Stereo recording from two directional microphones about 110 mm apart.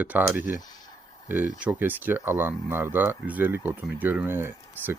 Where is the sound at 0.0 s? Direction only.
15° right (ahead or behind).